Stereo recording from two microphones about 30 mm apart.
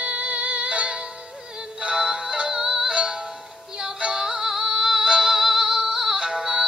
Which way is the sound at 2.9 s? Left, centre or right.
Right.